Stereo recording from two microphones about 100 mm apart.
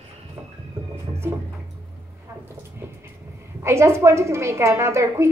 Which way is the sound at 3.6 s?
25° right (ahead or behind).